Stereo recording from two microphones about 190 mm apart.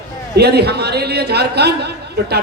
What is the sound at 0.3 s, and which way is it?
A man's voice, 60° right (ahead or behind).